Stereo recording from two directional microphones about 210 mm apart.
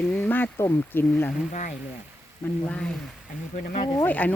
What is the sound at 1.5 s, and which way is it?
Speech, 35° left (ahead or behind).